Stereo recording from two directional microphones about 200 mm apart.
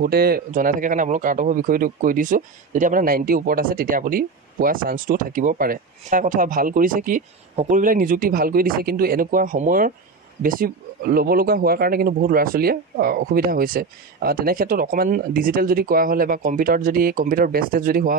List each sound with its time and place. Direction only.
0.0 s speech: 50° right (ahead or behind)